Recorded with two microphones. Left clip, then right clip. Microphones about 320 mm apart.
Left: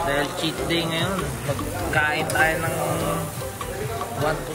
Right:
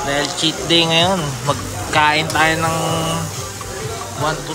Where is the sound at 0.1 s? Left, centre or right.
Centre.